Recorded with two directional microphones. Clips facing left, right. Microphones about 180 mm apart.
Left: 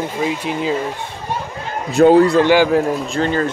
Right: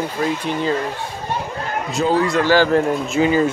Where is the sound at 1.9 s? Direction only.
60° left (ahead or behind).